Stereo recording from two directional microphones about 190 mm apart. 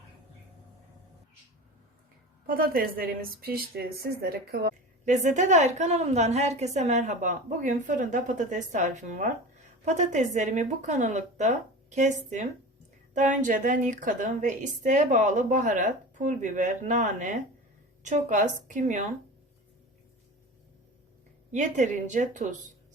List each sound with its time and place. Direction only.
2.5 s a woman's voice: 50° right (ahead or behind)
5.0 s a woman's voice: 40° right (ahead or behind)
21.5 s a woman's voice: 40° right (ahead or behind)